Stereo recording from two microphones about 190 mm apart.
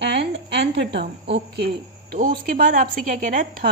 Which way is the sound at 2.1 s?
45° right (ahead or behind).